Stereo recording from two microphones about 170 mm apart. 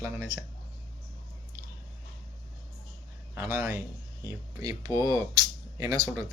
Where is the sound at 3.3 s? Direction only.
15° right (ahead or behind).